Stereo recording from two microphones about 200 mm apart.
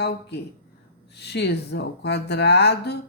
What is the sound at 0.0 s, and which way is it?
Speech, 55° left (ahead or behind).